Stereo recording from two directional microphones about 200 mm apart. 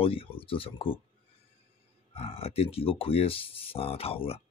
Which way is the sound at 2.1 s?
30° left (ahead or behind).